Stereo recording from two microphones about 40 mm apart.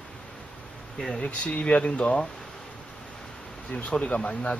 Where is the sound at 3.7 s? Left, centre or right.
Left.